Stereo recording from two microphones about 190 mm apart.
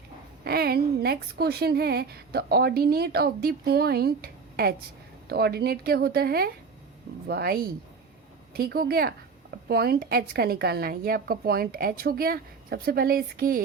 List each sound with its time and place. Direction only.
0.4 s a woman's voice: 55° right (ahead or behind)